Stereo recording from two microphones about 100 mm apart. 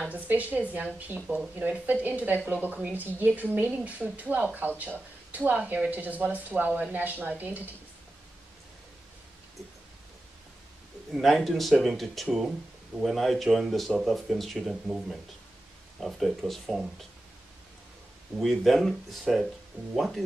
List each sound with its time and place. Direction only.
0.0 s speech: 15° right (ahead or behind)
11.1 s speech: centre (ahead or behind)
18.4 s speech: centre (ahead or behind)